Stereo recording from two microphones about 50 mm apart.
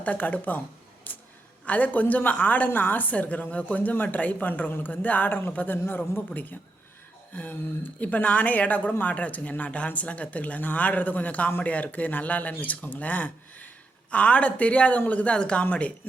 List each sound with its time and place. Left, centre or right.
0.0 s speech: left
1.1 s a sound: left
1.6 s speech: left
5.5 s speech: left